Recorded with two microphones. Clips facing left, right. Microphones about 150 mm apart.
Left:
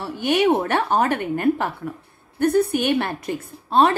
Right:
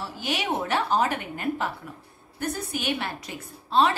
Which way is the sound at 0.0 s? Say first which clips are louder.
Left 11 dB; 60° left (ahead or behind).